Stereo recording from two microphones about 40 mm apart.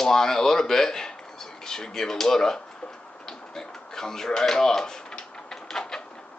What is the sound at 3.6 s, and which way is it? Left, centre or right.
Tick-tock, centre.